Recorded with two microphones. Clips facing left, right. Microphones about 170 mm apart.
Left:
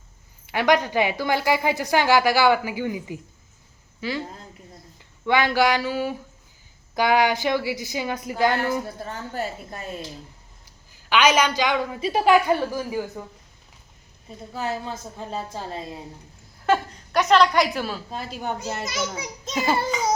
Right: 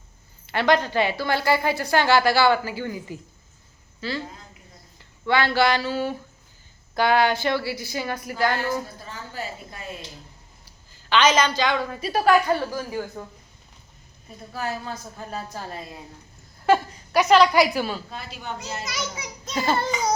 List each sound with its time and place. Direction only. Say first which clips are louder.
0.4 s a woman's voice: even; 15° left (ahead or behind)
5.2 s a woman's voice: left 1 dB; 15° left (ahead or behind)
9.0 s speech: left 4 dB; 50° left (ahead or behind)
10.9 s a woman's voice: even; 10° left (ahead or behind)
14.5 s a woman's voice: left 1 dB; 20° left (ahead or behind)
16.6 s a woman's voice: right 2 dB; centre (ahead or behind)
18.1 s speech: left 5 dB; 40° left (ahead or behind)
19.5 s a woman's voice: even; 10° left (ahead or behind)
19.9 s a sound: left 1 dB; centre (ahead or behind)